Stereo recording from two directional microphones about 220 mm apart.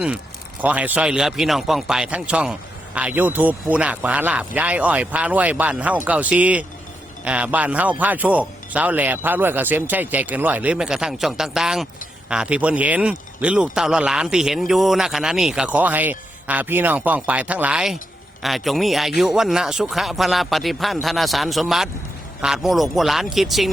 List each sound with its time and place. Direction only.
0.6 s a man's voice: 5° right (ahead or behind)